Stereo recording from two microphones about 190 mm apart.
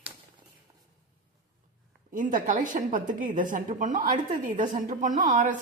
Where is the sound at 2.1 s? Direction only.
45° right (ahead or behind).